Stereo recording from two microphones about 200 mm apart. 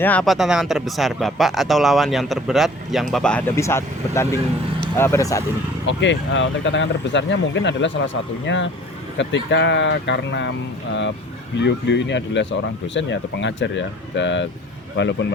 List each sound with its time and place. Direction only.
0.0 s speech: 5° left (ahead or behind)
5.9 s speech: 65° left (ahead or behind)
11.6 s speech: 60° left (ahead or behind)